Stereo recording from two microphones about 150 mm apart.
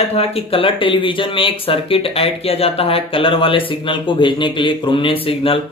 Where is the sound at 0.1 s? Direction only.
40° left (ahead or behind).